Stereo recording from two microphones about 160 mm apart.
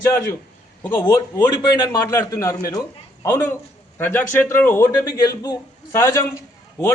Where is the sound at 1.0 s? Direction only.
20° left (ahead or behind).